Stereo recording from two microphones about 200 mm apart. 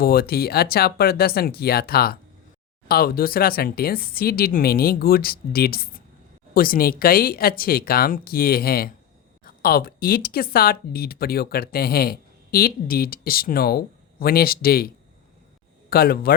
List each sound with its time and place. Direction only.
0.0 s speech: 50° left (ahead or behind)